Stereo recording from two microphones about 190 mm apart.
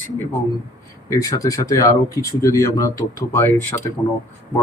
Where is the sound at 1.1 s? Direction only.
15° left (ahead or behind).